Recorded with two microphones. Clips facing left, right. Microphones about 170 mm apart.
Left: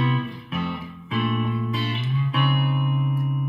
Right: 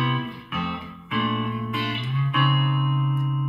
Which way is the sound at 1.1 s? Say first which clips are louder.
Left 1 dB; 30° left (ahead or behind).